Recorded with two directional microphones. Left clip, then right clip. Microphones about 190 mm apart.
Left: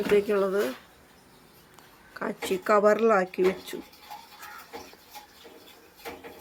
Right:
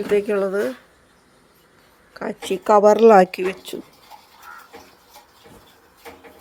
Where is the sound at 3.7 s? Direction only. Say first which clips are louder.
Right 6 dB; 25° right (ahead or behind).